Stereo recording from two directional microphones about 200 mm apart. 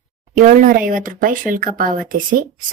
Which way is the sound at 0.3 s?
40° right (ahead or behind).